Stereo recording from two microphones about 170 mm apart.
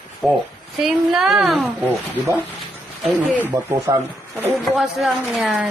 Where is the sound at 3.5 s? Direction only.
15° right (ahead or behind).